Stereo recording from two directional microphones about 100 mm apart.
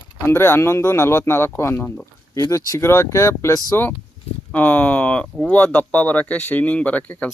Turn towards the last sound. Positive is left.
turn(degrees=15)  # may be behind; listen again after turning